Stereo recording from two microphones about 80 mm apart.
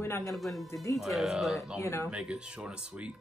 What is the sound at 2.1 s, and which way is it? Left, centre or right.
Speech, centre.